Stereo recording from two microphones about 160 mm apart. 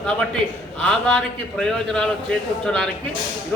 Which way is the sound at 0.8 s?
5° left (ahead or behind).